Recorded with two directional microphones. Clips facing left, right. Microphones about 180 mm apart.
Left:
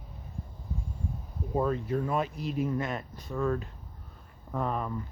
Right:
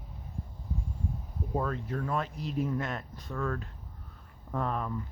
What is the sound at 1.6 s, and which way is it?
Speech, 10° left (ahead or behind).